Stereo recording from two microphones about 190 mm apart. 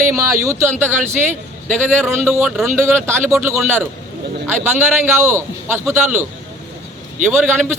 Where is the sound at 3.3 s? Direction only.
15° right (ahead or behind).